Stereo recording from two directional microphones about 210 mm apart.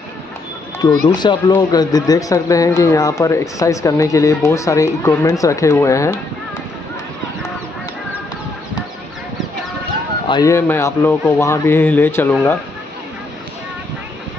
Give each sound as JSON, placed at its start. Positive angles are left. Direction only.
{"t": 1.0, "sound": "speech", "side_deg": 20}
{"t": 10.2, "sound": "speech", "side_deg": 20}